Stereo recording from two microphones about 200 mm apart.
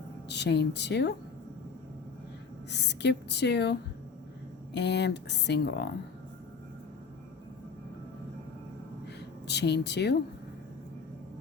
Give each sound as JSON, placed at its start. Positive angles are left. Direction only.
{"t": 0.3, "sound": "speech", "side_deg": 60}
{"t": 2.6, "sound": "speech", "side_deg": 60}
{"t": 9.5, "sound": "speech", "side_deg": 55}